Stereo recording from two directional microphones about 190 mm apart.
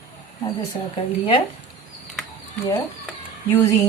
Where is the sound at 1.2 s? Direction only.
30° left (ahead or behind).